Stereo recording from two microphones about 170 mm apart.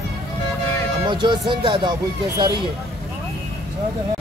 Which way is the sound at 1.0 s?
25° right (ahead or behind).